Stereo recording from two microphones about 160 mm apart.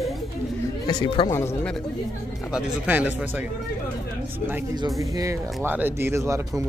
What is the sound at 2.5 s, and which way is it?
Speech, 5° right (ahead or behind).